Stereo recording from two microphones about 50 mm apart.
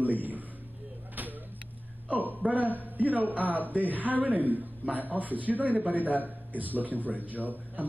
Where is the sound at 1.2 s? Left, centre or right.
Right.